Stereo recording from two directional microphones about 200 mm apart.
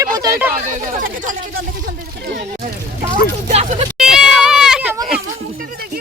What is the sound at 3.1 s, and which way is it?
Speech, 35° right (ahead or behind).